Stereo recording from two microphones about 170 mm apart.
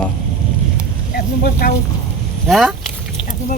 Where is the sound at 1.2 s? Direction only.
65° left (ahead or behind).